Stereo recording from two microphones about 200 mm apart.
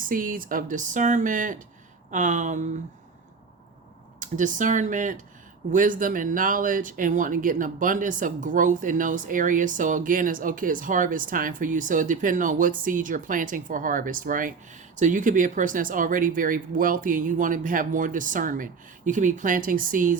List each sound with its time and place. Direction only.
0.0 s speech: 45° right (ahead or behind)
4.2 s speech: 40° right (ahead or behind)